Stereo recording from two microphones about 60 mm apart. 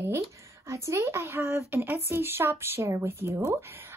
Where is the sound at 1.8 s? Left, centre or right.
Right.